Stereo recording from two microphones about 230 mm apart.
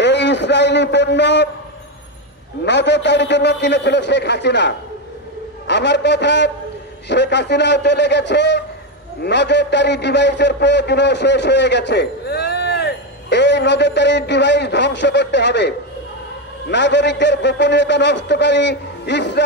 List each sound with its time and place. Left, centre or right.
0.0 s a man's voice: left
2.6 s a man's voice: left